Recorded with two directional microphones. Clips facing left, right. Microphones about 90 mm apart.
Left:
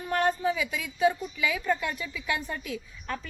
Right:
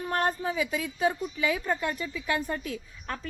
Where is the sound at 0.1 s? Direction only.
35° right (ahead or behind).